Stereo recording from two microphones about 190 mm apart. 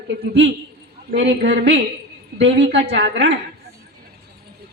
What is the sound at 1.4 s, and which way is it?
A woman's voice, 65° right (ahead or behind).